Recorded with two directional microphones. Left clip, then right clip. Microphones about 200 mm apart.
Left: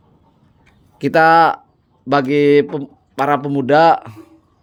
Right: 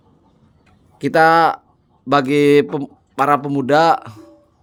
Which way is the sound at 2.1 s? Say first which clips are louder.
Even; centre (ahead or behind).